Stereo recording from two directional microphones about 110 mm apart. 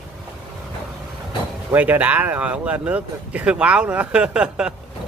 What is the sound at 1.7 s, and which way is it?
Speech, 15° right (ahead or behind).